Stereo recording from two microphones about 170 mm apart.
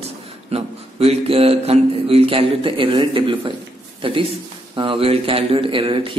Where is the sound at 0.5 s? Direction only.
35° right (ahead or behind).